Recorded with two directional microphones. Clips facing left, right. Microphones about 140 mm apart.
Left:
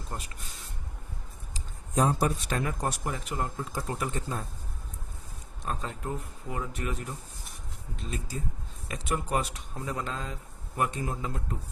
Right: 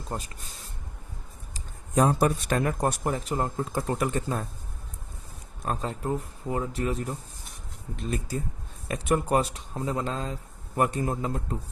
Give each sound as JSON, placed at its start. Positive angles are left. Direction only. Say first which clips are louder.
{"t": 0.1, "sound": "speech", "louder": "right 5 dB", "side_deg": -30}
{"t": 1.5, "sound": "speech", "louder": "right 4 dB", "side_deg": -60}
{"t": 3.8, "sound": "speech", "louder": "right 6 dB", "side_deg": -60}
{"t": 5.6, "sound": "speech", "louder": "right 5 dB", "side_deg": -35}
{"t": 8.9, "sound": "speech", "louder": "right 6 dB", "side_deg": -50}
{"t": 10.8, "sound": "speech", "louder": "right 5 dB", "side_deg": -45}